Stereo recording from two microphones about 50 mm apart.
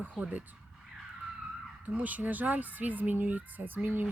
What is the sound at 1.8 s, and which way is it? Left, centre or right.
Speech, right.